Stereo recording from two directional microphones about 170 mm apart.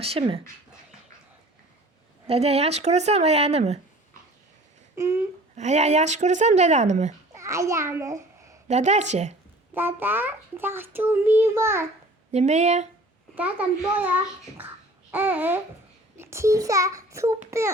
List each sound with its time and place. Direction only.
0.0 s speech: 35° right (ahead or behind)
2.2 s speech: 35° right (ahead or behind)
5.5 s speech: 40° right (ahead or behind)
7.3 s a child's voice: 15° right (ahead or behind)
8.6 s speech: 40° right (ahead or behind)
9.7 s a child's voice: 10° right (ahead or behind)
12.3 s speech: 40° right (ahead or behind)
13.3 s a child's voice: 10° right (ahead or behind)